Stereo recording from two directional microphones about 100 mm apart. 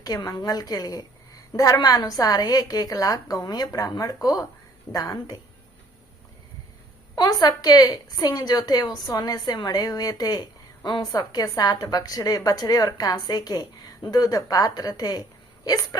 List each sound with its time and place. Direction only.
0.0 s a woman's voice: 40° left (ahead or behind)
7.2 s a woman's voice: 40° left (ahead or behind)